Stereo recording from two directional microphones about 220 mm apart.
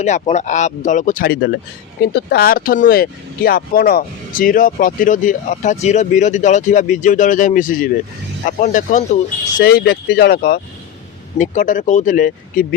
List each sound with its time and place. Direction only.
0.0 s speech: 30° left (ahead or behind)
9.6 s speech: 45° left (ahead or behind)